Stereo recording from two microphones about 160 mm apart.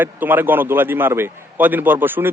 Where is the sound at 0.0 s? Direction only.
10° right (ahead or behind).